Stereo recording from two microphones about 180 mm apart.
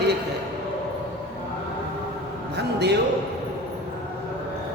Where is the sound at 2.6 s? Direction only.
65° right (ahead or behind).